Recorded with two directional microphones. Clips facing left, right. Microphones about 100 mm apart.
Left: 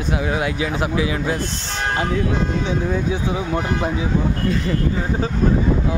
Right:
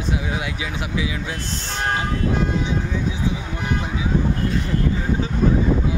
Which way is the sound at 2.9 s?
65° left (ahead or behind).